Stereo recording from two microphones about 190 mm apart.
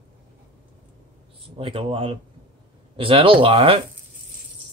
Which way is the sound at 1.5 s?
30° right (ahead or behind).